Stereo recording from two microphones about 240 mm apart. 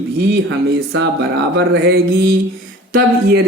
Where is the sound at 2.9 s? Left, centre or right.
Right.